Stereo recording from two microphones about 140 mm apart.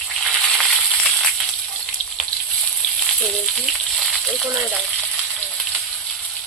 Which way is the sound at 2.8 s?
5° left (ahead or behind).